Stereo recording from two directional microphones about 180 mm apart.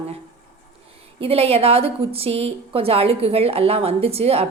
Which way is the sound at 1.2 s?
35° right (ahead or behind).